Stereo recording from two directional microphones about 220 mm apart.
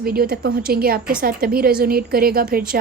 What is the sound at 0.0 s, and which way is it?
A woman's voice, 45° right (ahead or behind).